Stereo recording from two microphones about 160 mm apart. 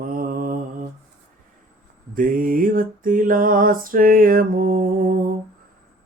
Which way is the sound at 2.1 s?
60° right (ahead or behind).